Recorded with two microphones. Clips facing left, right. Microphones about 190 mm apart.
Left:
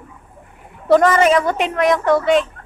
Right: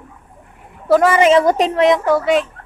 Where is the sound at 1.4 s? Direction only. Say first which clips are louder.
Right 5 dB; 35° right (ahead or behind).